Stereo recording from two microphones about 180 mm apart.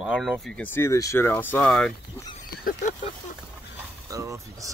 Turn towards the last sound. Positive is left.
turn(degrees=-15)  # may be behind; listen again after turning